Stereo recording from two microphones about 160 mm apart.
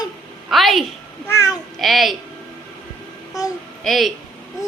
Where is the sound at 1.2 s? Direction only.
20° left (ahead or behind).